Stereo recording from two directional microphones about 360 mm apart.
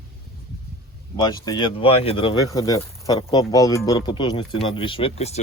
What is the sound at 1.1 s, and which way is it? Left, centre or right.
Speech, centre.